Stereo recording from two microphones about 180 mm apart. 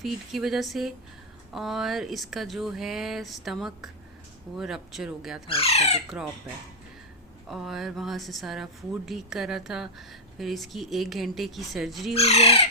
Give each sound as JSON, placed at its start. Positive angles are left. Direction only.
{"t": 0.0, "sound": "a woman's voice", "side_deg": 0}
{"t": 5.5, "sound": "speech", "side_deg": 35}
{"t": 7.5, "sound": "a woman's voice", "side_deg": 0}
{"t": 12.1, "sound": "speech", "side_deg": 35}